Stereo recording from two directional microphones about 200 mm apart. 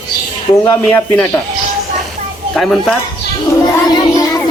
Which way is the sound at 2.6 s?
Centre (ahead or behind).